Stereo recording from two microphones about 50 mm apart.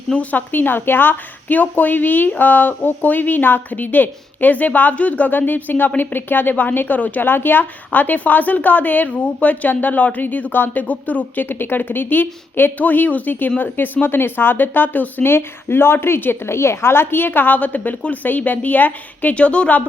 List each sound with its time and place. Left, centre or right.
0.1 s speech: left